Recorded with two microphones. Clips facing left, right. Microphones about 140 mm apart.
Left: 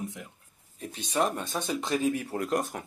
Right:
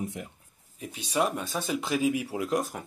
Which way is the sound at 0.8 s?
10° right (ahead or behind).